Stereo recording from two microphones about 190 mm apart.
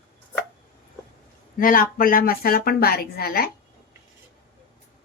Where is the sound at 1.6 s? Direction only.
45° left (ahead or behind).